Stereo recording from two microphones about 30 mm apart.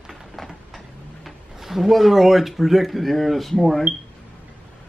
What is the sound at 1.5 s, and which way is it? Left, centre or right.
Speech, centre.